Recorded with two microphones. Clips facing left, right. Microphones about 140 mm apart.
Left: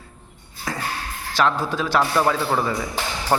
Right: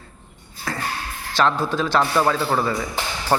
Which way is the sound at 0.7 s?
15° left (ahead or behind).